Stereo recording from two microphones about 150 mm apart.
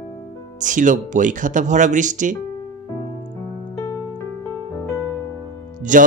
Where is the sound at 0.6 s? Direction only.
60° right (ahead or behind).